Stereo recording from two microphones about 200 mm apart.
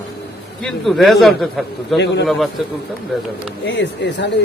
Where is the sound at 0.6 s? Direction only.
Centre (ahead or behind).